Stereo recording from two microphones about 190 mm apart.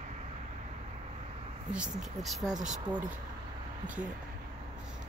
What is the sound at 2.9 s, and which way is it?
Speech, 20° right (ahead or behind).